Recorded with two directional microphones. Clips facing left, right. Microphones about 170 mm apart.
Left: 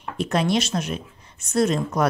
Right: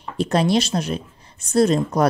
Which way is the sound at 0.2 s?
35° right (ahead or behind).